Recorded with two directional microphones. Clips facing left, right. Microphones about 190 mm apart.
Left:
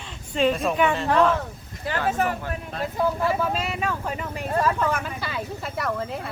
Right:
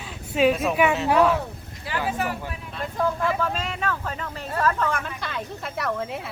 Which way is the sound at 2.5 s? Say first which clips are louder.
Left 3 dB; 45° left (ahead or behind).